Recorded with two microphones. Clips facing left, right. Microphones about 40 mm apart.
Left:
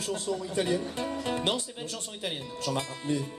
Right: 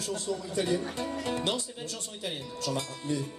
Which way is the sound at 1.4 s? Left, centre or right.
Left.